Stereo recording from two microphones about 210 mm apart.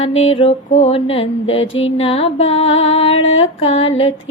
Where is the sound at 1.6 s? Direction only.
65° left (ahead or behind).